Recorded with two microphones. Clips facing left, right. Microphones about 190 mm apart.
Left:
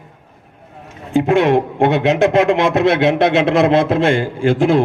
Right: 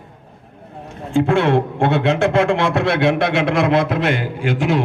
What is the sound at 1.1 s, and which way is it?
A man's voice, 15° left (ahead or behind).